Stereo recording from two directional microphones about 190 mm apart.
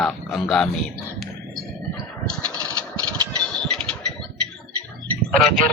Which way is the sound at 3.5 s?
5° left (ahead or behind).